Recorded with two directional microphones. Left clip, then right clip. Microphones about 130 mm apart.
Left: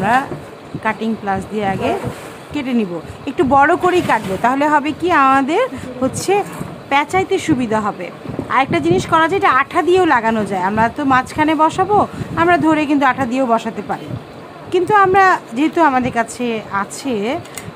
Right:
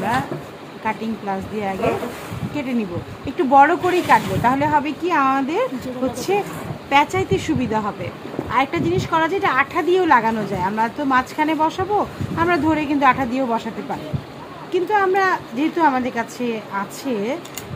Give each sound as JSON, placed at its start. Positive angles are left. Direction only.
{"t": 0.8, "sound": "speech", "side_deg": 45}
{"t": 6.3, "sound": "speech", "side_deg": 45}